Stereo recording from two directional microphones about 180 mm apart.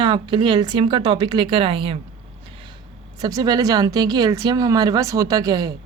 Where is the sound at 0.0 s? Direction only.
25° right (ahead or behind).